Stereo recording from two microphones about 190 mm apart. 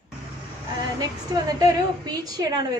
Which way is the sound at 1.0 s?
20° right (ahead or behind).